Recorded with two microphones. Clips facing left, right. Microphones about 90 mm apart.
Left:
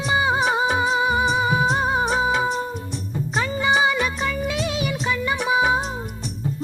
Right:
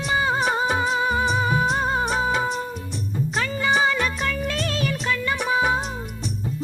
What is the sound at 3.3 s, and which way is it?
Music, 20° left (ahead or behind).